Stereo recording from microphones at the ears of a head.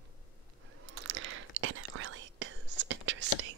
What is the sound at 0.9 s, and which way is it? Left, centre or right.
Whispering, right.